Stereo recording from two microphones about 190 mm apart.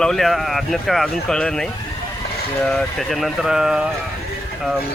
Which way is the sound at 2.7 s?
Centre (ahead or behind).